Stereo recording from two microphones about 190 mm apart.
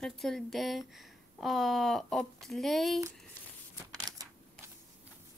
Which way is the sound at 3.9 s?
20° right (ahead or behind).